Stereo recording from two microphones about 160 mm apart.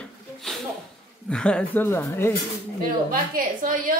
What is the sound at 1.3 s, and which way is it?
Speech, 5° left (ahead or behind).